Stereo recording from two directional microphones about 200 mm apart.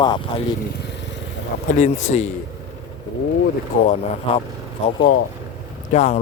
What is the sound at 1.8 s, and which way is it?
Speech, 35° left (ahead or behind).